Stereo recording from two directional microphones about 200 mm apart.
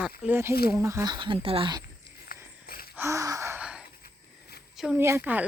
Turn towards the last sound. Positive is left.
turn(degrees=-10)  # may be behind; listen again after turning